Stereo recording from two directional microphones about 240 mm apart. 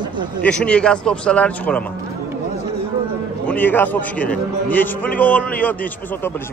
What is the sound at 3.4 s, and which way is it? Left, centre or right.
A man's voice, centre.